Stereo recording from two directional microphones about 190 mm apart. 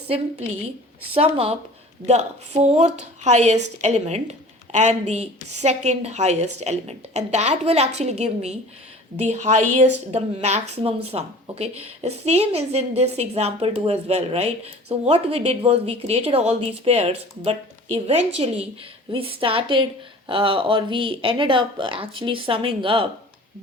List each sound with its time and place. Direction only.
1.1 s a woman's voice: 30° right (ahead or behind)